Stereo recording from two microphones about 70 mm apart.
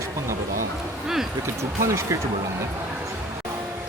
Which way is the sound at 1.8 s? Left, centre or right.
Right.